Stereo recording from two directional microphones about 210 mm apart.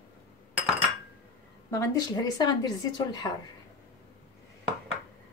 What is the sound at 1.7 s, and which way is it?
Speech, 20° left (ahead or behind).